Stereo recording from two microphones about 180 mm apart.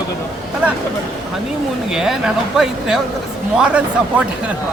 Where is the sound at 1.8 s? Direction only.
5° right (ahead or behind).